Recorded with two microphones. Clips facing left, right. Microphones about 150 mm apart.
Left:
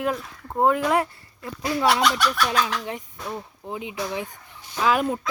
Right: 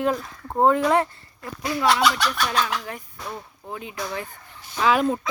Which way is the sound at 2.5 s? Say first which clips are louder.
Left 1 dB; 20° left (ahead or behind).